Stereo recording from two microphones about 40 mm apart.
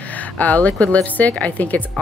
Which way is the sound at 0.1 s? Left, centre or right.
Left.